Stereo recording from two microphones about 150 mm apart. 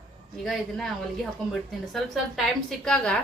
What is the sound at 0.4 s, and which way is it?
A woman's voice, centre (ahead or behind).